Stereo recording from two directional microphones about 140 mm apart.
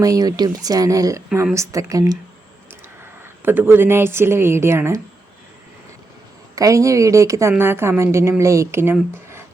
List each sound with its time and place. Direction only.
0.0 s a woman's voice: 25° right (ahead or behind)
3.0 s speech: 15° right (ahead or behind)
6.6 s a woman's voice: 25° right (ahead or behind)